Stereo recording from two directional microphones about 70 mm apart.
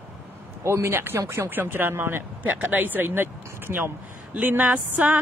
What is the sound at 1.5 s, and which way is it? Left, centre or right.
Speech, right.